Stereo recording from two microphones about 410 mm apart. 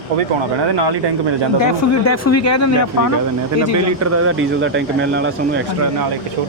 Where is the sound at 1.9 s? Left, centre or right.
Left.